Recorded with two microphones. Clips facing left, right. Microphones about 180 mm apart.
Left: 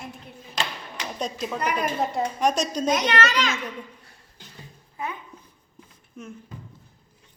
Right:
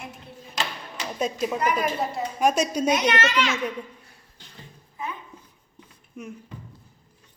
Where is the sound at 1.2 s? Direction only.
5° right (ahead or behind).